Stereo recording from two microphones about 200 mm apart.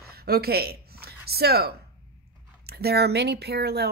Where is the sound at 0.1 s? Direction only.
50° right (ahead or behind).